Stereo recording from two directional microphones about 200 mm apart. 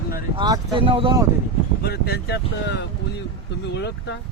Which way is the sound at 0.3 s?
20° right (ahead or behind).